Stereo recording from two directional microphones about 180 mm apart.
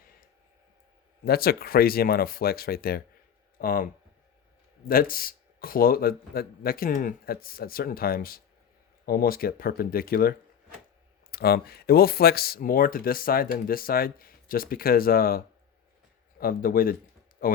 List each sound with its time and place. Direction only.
1.2 s speech: 55° left (ahead or behind)
4.9 s speech: 55° left (ahead or behind)
16.4 s speech: 55° left (ahead or behind)